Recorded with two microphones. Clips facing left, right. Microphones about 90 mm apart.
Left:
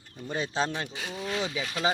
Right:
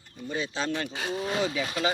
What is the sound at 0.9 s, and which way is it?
Speech, 60° right (ahead or behind).